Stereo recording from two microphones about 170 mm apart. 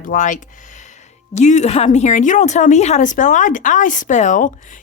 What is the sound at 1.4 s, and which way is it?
Speech, 45° left (ahead or behind).